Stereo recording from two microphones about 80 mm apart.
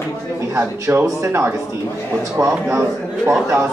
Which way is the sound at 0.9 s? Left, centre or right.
Right.